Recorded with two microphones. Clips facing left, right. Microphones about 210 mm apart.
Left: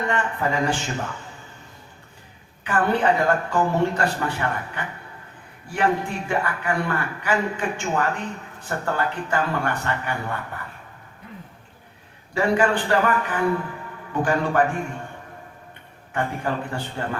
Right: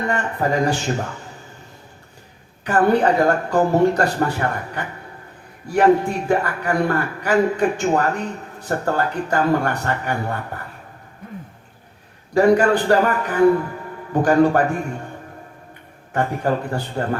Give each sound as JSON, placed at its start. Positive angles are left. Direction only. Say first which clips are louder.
{"t": 0.1, "sound": "a man's voice", "louder": "right 3 dB", "side_deg": -40}
{"t": 2.6, "sound": "a man's voice", "louder": "right 5 dB", "side_deg": -40}
{"t": 12.3, "sound": "a man's voice", "louder": "right 6 dB", "side_deg": -40}
{"t": 16.1, "sound": "a man's voice", "louder": "right 5 dB", "side_deg": -40}